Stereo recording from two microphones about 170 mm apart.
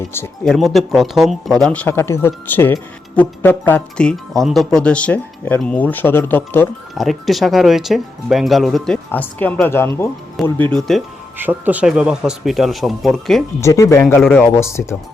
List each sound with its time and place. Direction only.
0.4 s speech: centre (ahead or behind)
6.9 s speech: centre (ahead or behind)
11.3 s speech: 10° right (ahead or behind)
13.6 s speech: 15° left (ahead or behind)